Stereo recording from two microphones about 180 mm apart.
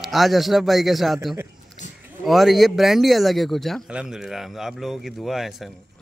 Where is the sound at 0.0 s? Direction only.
Centre (ahead or behind).